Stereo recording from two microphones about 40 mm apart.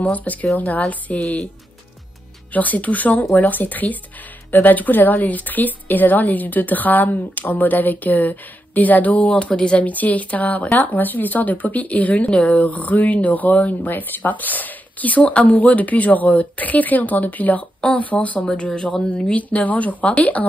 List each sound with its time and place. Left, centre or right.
0.0 s speech: left
2.5 s speech: left
19.3 s speech: left